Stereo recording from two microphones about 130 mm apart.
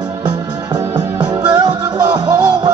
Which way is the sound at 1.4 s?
30° right (ahead or behind).